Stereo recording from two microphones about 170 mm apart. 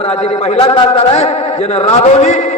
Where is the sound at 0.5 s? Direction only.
35° left (ahead or behind).